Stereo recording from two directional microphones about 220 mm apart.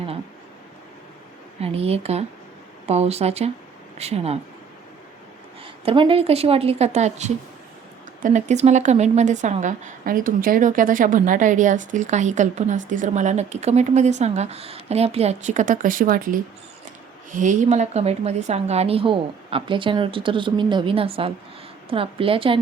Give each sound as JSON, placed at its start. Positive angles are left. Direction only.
{"t": 1.6, "sound": "a woman's voice", "side_deg": -25}
{"t": 5.6, "sound": "a woman's voice", "side_deg": -25}